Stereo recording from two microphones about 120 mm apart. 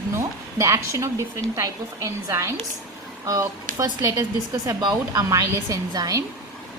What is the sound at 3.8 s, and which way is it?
A woman's voice, 30° right (ahead or behind).